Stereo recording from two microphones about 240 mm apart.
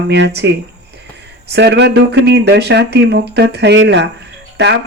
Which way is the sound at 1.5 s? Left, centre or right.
Right.